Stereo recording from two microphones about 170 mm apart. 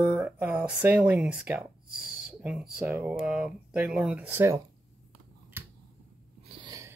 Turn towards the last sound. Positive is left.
turn(degrees=-25)  # may be behind; listen again after turning